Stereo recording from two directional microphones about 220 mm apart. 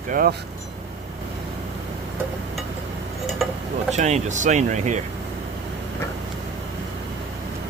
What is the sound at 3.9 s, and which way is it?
Speech, 30° right (ahead or behind).